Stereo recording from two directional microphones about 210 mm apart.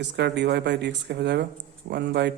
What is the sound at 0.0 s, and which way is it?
A man's voice, 55° right (ahead or behind).